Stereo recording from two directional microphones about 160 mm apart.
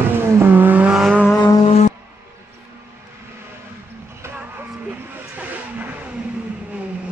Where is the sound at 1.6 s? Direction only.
45° left (ahead or behind).